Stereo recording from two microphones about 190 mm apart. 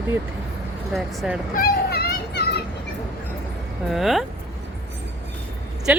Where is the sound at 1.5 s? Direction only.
50° left (ahead or behind).